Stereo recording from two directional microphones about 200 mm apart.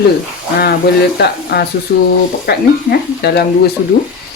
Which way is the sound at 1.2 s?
55° left (ahead or behind).